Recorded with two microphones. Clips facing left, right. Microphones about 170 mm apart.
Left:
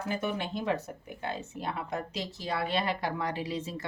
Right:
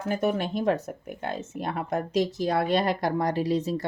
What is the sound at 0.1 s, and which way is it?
Speech, 45° right (ahead or behind).